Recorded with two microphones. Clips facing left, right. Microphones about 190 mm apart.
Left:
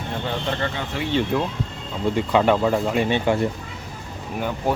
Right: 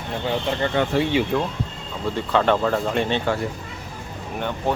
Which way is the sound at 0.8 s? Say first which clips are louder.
Right 9 dB; 65° right (ahead or behind).